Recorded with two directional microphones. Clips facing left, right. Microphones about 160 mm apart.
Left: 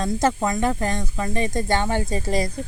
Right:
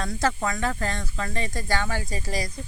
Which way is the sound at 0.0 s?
20° left (ahead or behind).